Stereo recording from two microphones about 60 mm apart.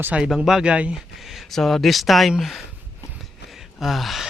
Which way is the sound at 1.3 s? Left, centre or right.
Centre.